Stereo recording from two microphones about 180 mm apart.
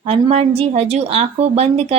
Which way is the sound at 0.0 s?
35° right (ahead or behind).